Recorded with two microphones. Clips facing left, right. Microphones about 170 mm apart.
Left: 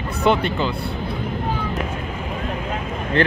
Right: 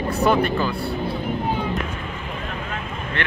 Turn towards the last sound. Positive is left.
turn(degrees=35)  # may be behind; listen again after turning